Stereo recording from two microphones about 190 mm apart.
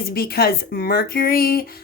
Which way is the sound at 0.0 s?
55° left (ahead or behind).